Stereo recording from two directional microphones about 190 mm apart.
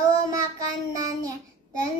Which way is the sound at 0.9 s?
20° right (ahead or behind).